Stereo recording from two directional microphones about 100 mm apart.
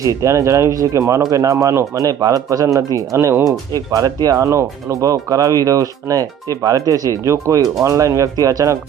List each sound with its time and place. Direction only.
0.0 s speech: 35° right (ahead or behind)